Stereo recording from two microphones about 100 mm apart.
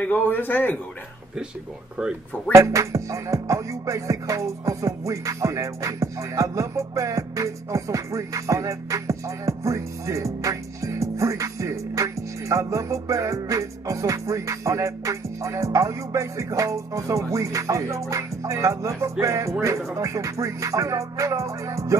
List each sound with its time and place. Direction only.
0.0 s a man's voice: 20° left (ahead or behind)
2.5 s music: 30° right (ahead or behind)